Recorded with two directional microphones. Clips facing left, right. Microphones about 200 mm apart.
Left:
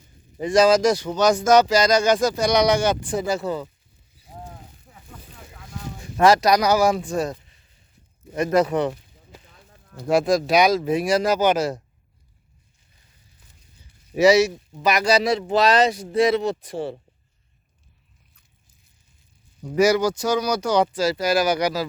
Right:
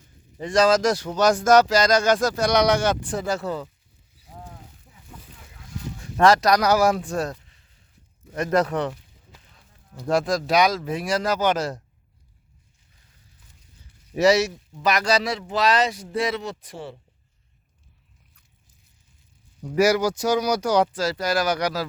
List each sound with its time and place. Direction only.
0.3 s speech: 5° left (ahead or behind)
6.0 s speech: 5° left (ahead or behind)
8.4 s speech: centre (ahead or behind)
10.1 s speech: 10° left (ahead or behind)
14.2 s speech: centre (ahead or behind)
15.2 s speech: 20° left (ahead or behind)
19.8 s speech: 10° right (ahead or behind)